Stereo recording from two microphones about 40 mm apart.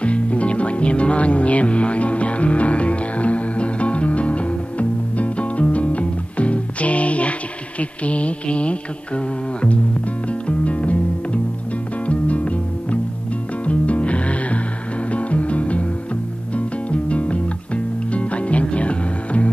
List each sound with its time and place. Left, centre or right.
0.0 s music: left
7.8 s mantra: left
10.6 s music: left
12.1 s music: left